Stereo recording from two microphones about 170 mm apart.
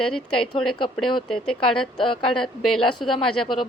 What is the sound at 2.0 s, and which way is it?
Speech, 30° left (ahead or behind).